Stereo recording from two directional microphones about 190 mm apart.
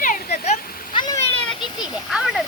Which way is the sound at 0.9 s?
20° left (ahead or behind).